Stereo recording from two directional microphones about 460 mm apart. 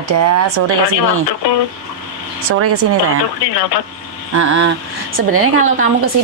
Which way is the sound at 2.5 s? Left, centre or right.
Right.